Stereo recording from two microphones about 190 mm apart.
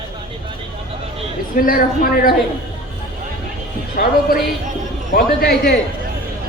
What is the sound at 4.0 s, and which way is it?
A man's voice, 55° left (ahead or behind).